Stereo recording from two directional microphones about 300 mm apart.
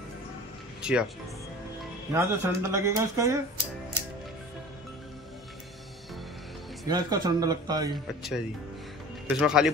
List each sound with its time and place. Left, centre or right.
0.8 s speech: centre
2.1 s speech: centre
6.9 s speech: centre
7.9 s speech: centre